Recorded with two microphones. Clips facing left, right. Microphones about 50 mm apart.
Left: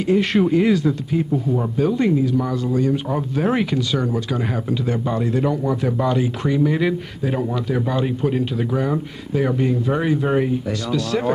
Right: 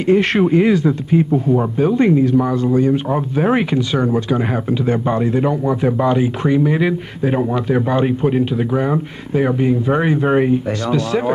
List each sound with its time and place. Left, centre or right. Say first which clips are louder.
0.4 s speech: right 3 dB; right